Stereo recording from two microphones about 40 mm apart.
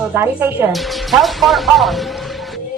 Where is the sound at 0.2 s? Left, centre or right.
Right.